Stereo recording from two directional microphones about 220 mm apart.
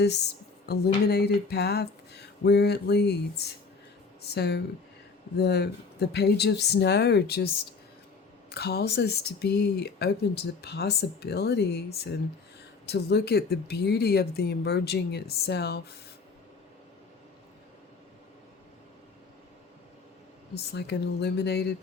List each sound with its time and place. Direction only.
0.7 s speech: 45° left (ahead or behind)
8.4 s speech: 45° left (ahead or behind)
20.6 s speech: 50° left (ahead or behind)